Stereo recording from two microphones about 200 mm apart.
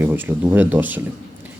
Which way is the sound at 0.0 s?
10° right (ahead or behind).